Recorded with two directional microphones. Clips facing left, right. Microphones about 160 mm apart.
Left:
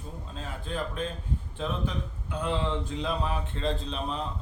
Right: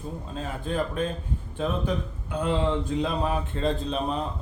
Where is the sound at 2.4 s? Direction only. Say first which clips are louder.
Right 5 dB; 50° right (ahead or behind).